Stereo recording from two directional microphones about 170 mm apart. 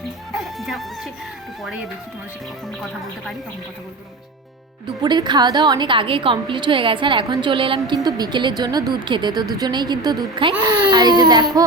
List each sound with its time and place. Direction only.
0.6 s speech: centre (ahead or behind)
5.0 s a woman's voice: 25° right (ahead or behind)